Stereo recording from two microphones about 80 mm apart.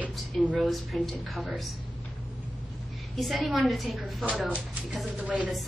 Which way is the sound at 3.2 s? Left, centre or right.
Centre.